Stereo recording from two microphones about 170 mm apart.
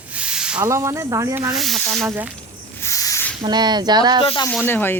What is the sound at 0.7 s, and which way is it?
Speech, 15° right (ahead or behind).